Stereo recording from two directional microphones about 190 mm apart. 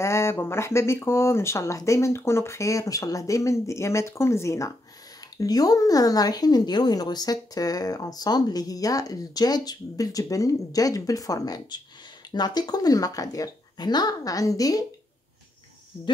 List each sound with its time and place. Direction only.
0.0 s a woman's voice: 15° left (ahead or behind)